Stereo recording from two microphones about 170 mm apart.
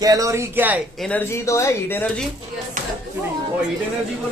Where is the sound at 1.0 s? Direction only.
10° left (ahead or behind).